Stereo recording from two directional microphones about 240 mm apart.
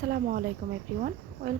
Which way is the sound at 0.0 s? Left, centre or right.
Right.